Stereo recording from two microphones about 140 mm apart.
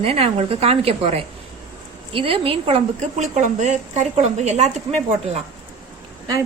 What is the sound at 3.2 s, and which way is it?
A woman's voice, 55° right (ahead or behind).